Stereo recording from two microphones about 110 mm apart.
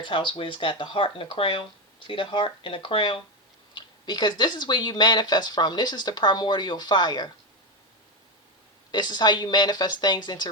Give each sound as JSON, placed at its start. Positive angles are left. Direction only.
{"t": 0.0, "sound": "speech", "side_deg": 50}
{"t": 8.9, "sound": "speech", "side_deg": 40}